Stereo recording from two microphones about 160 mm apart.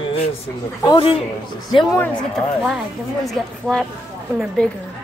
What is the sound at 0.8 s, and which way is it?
Speech, 35° left (ahead or behind).